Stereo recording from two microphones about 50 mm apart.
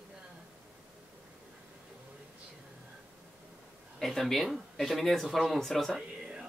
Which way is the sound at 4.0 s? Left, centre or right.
Centre.